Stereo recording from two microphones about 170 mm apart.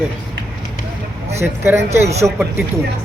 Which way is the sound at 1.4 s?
15° right (ahead or behind).